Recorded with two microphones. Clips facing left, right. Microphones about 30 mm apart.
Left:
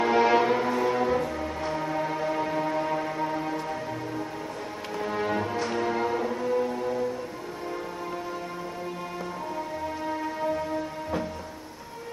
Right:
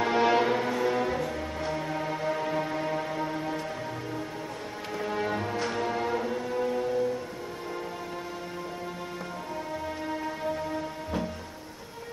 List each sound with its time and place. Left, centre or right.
0.0 s music: centre
4.9 s music: centre
10.2 s music: centre